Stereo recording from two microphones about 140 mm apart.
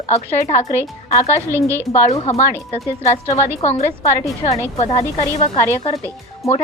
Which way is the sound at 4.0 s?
25° left (ahead or behind).